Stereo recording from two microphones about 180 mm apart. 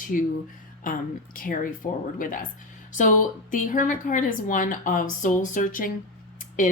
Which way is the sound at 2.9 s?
45° left (ahead or behind).